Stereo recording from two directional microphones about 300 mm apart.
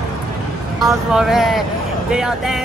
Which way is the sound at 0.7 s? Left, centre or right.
Centre.